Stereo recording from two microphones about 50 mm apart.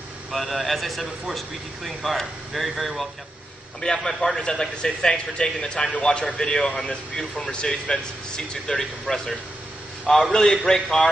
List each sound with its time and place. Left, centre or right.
0.3 s a man's voice: centre
3.8 s speech: centre